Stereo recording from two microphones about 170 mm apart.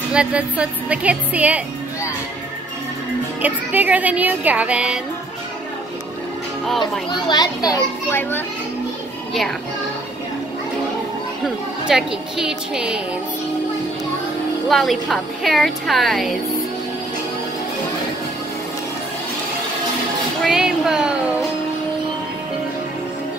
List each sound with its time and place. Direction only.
0.1 s a woman's voice: 5° right (ahead or behind)
3.4 s a woman's voice: 10° right (ahead or behind)
6.8 s a child's voice: 25° left (ahead or behind)
11.4 s a woman's voice: centre (ahead or behind)
14.7 s a woman's voice: centre (ahead or behind)
20.4 s speech: 5° right (ahead or behind)